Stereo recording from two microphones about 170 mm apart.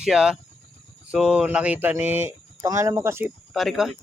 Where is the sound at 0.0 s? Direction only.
5° right (ahead or behind).